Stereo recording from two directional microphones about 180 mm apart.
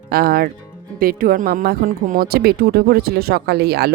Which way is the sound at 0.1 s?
55° right (ahead or behind).